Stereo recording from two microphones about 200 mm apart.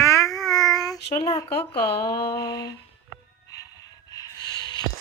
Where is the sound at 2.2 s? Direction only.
20° left (ahead or behind).